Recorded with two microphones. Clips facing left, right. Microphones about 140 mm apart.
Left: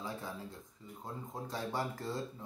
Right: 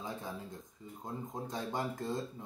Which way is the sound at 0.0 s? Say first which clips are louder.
Right 1 dB; 20° right (ahead or behind).